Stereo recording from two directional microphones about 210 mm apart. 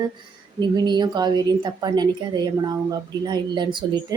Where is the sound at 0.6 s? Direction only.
20° right (ahead or behind).